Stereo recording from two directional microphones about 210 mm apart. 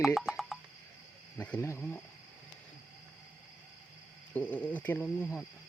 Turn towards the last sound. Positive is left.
turn(degrees=10)  # may be behind; listen again after turning